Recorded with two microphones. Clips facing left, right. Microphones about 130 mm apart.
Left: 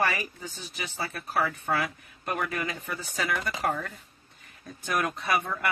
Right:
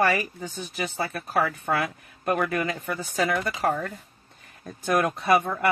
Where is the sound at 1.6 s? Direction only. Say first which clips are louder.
Right 3 dB; 45° right (ahead or behind).